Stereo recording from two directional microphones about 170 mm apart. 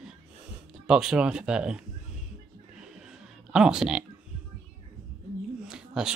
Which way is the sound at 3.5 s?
5° right (ahead or behind).